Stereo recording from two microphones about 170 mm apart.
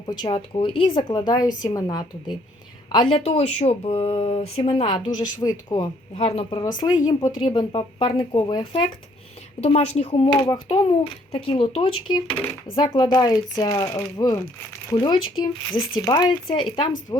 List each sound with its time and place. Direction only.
0.0 s speech: 25° left (ahead or behind)
6.6 s speech: 25° left (ahead or behind)